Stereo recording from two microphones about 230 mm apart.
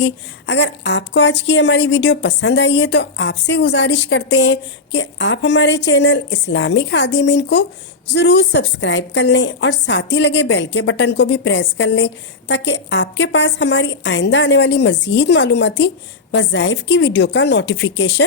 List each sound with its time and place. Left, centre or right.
0.0 s a woman's voice: left